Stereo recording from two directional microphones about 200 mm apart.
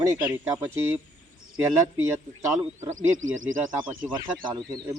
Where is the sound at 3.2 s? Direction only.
80° right.